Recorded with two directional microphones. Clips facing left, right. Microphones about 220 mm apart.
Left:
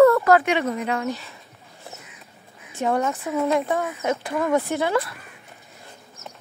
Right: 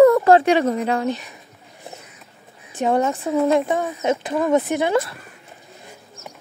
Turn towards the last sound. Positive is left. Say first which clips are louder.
# right 3 dB
turn(degrees=-20)  # may be behind; listen again after turning